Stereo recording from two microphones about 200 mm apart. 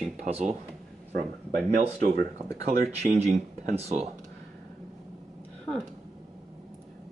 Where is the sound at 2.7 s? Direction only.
35° right (ahead or behind).